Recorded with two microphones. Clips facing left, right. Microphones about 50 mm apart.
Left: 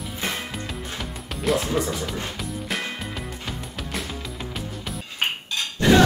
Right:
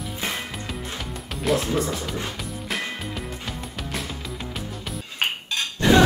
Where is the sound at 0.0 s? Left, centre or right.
Centre.